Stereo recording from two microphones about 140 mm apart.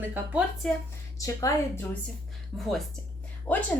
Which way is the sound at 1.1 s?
25° left (ahead or behind).